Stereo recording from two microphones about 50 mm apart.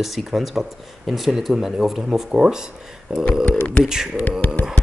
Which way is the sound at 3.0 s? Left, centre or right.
Centre.